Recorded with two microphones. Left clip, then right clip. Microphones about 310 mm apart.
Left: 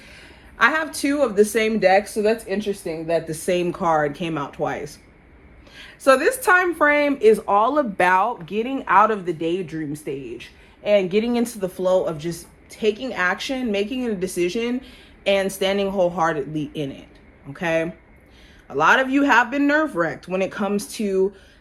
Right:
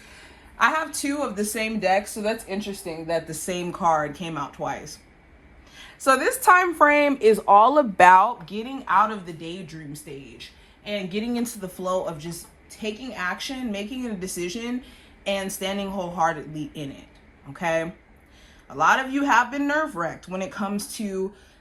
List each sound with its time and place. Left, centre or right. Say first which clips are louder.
0.1 s a sound: left 3 dB; centre
0.9 s speech: left 9 dB; centre
11.4 s speech: left 7 dB; centre